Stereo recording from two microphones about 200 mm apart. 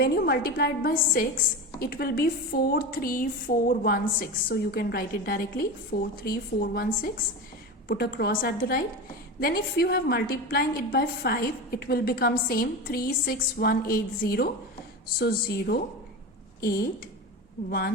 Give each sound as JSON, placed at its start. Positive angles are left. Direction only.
{"t": 0.0, "sound": "a woman's voice", "side_deg": 50}
{"t": 17.7, "sound": "a woman's voice", "side_deg": 50}